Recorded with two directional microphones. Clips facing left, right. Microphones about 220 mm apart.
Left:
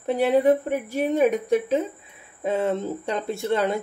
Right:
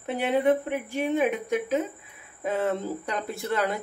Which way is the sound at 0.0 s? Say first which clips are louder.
Left 5 dB; 35° left (ahead or behind).